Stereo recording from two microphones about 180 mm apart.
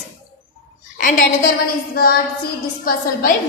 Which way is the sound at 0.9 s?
50° left (ahead or behind).